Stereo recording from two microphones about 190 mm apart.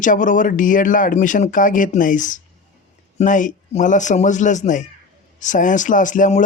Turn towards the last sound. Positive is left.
turn(degrees=40)  # may be behind; listen again after turning